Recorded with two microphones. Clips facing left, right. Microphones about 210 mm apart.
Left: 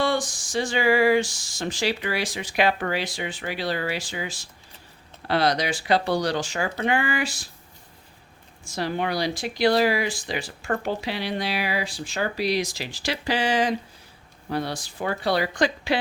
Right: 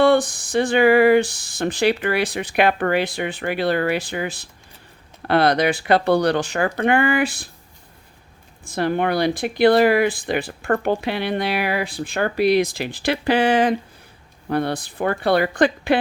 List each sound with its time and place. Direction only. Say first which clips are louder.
0.0 s speech: right 9 dB; 60° right (ahead or behind)
8.6 s speech: right 6 dB; 55° right (ahead or behind)